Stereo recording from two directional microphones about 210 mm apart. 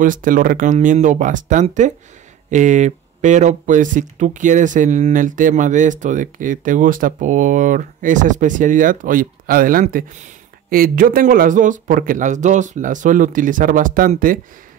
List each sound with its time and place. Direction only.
0.0 s speech: 40° right (ahead or behind)